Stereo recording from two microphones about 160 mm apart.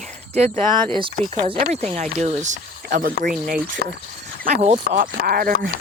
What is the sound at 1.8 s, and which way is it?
Speech, 45° right (ahead or behind).